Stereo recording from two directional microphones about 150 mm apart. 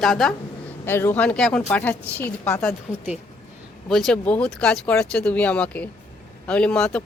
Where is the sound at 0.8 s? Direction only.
15° left (ahead or behind).